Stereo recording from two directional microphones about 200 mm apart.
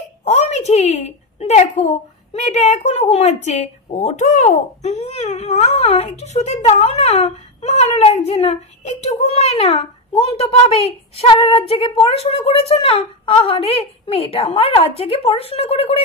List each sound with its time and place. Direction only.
0.2 s a woman's voice: 30° left (ahead or behind)